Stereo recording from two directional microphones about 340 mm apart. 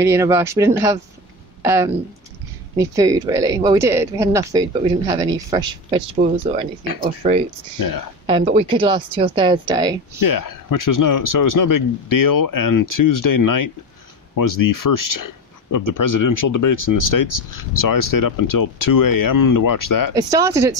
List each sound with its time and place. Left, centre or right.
0.0 s speech: centre
7.8 s speech: left
8.3 s speech: centre
10.2 s speech: left
20.2 s speech: centre